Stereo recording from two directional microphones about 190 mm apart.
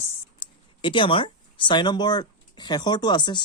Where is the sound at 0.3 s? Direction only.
25° left (ahead or behind).